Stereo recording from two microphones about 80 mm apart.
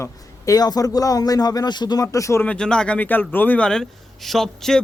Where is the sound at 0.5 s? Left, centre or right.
Left.